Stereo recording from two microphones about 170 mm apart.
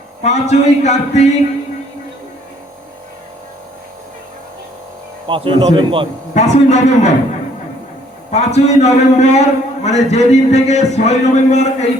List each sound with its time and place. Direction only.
0.2 s speech: 40° left (ahead or behind)
5.3 s speech: 30° right (ahead or behind)
6.3 s speech: 45° left (ahead or behind)
8.3 s a man's voice: 40° left (ahead or behind)